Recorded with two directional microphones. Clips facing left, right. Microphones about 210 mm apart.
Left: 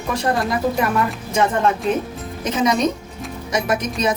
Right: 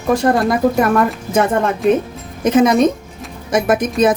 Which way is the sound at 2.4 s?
50° right (ahead or behind).